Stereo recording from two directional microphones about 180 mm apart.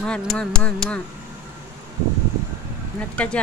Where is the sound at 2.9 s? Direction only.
5° left (ahead or behind).